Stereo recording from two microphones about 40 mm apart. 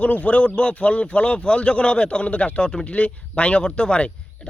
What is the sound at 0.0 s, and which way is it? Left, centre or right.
A man's voice, left.